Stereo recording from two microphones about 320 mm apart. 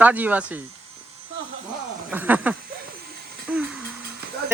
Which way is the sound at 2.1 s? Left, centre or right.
Centre.